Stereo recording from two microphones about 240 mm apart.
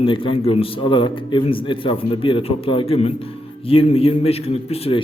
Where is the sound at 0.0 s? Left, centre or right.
Left.